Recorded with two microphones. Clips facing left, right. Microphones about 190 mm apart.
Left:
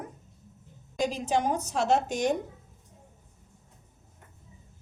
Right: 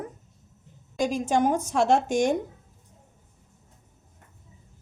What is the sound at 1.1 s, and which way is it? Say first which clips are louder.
A woman's voice: right 6 dB; 50° right (ahead or behind).